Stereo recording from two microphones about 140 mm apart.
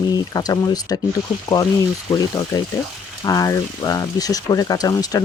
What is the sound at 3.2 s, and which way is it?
Speech, 25° left (ahead or behind).